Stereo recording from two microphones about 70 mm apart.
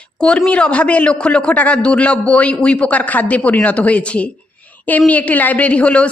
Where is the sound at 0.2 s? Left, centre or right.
Centre.